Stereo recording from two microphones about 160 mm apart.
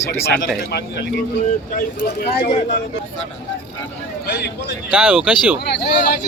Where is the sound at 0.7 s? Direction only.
90° left.